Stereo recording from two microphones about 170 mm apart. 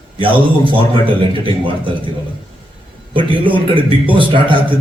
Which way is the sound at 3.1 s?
30° right (ahead or behind).